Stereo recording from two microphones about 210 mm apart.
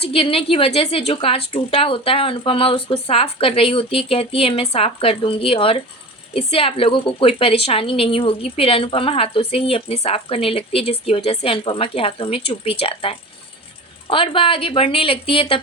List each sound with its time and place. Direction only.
0.0 s a woman's voice: 25° left (ahead or behind)